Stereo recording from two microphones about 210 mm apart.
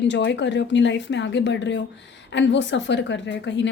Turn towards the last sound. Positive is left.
turn(degrees=60)  # may be behind; listen again after turning